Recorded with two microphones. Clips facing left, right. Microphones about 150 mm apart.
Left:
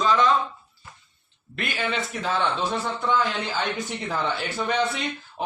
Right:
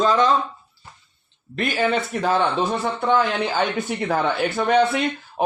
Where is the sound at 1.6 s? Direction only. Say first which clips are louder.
Right 7 dB; 40° right (ahead or behind); by 5.4 s 60° right (ahead or behind).